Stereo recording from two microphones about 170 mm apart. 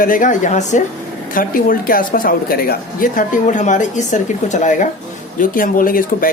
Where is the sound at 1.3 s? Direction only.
55° left (ahead or behind).